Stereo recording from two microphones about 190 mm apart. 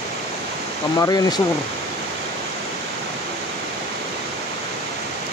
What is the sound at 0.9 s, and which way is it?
Speech, 20° left (ahead or behind).